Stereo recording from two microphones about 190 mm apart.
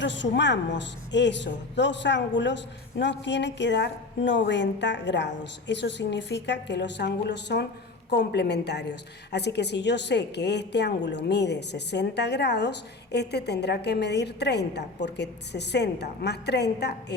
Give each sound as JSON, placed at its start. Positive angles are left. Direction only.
{"t": 0.0, "sound": "a woman's voice", "side_deg": 70}